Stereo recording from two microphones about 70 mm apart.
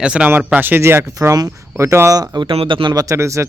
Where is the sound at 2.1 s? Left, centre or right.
Right.